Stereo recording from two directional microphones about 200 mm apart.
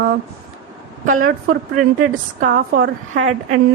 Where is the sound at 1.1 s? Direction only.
45° right (ahead or behind).